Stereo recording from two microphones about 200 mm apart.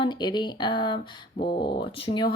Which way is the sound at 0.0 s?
20° left (ahead or behind).